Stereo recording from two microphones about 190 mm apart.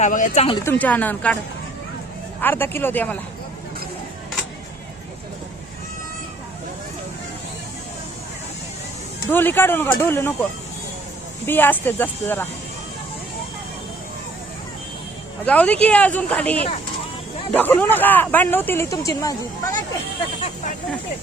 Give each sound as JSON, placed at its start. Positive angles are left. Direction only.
{"t": 0.0, "sound": "speech", "side_deg": 45}
{"t": 0.6, "sound": "speech", "side_deg": 10}
{"t": 2.4, "sound": "speech", "side_deg": 10}
{"t": 9.3, "sound": "speech", "side_deg": 10}
{"t": 11.4, "sound": "speech", "side_deg": 10}
{"t": 15.4, "sound": "speech", "side_deg": 5}